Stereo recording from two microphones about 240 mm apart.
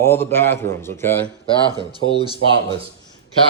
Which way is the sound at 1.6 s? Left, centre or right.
Centre.